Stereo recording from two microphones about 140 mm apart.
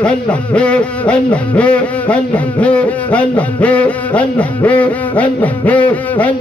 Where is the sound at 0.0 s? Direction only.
10° left (ahead or behind).